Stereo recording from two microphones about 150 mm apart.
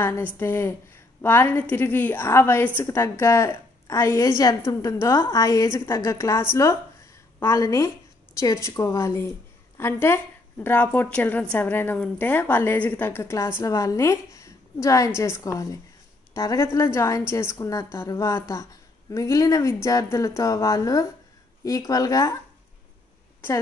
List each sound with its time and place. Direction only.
0.0 s a woman's voice: 15° left (ahead or behind)